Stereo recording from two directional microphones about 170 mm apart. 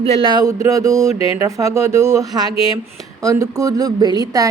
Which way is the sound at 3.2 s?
20° right (ahead or behind).